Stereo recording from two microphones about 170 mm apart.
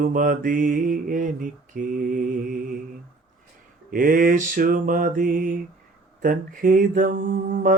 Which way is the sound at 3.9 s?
55° right (ahead or behind).